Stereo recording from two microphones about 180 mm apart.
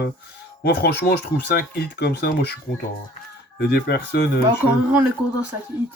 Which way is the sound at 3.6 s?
65° left (ahead or behind).